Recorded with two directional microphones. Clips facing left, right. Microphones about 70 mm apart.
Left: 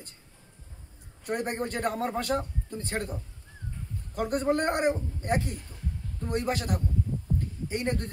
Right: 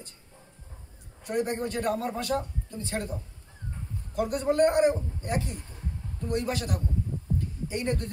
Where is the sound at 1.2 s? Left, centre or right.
Left.